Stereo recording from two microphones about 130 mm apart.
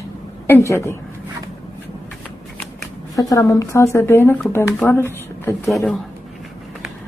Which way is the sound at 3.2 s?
25° left (ahead or behind).